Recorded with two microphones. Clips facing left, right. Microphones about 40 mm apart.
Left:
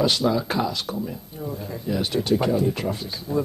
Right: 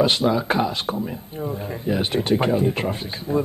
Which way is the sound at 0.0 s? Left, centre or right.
Right.